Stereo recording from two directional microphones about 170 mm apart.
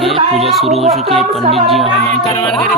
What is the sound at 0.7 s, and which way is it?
Speech, 40° right (ahead or behind).